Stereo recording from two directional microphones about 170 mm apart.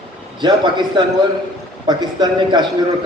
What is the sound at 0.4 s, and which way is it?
A man's voice, 25° right (ahead or behind).